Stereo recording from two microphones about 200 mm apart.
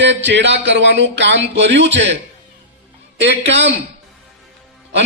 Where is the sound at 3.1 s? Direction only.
60° right (ahead or behind).